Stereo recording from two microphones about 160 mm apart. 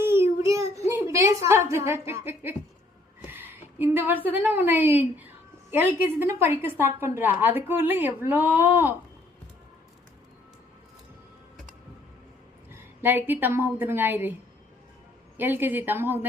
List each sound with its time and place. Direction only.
0.0 s a sound: 15° right (ahead or behind)
3.2 s a woman's voice: 15° right (ahead or behind)
12.7 s a woman's voice: 15° right (ahead or behind)
15.4 s a woman's voice: 15° right (ahead or behind)